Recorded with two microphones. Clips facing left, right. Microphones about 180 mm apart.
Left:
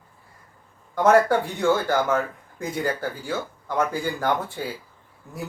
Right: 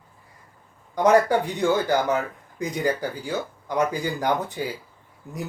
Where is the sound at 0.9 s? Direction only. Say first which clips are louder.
Even; 15° right (ahead or behind).